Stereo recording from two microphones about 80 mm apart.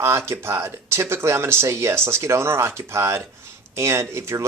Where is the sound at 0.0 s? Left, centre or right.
Right.